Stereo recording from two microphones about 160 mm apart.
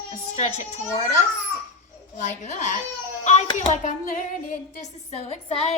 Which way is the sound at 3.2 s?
45° left (ahead or behind).